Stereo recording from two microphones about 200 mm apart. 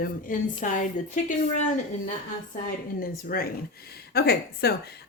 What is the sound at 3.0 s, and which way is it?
Speech, 45° left (ahead or behind).